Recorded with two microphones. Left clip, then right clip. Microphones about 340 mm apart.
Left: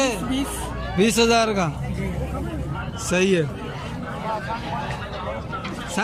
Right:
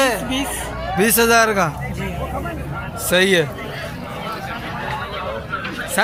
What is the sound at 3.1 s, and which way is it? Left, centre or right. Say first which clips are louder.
Speech: right 5 dB; centre.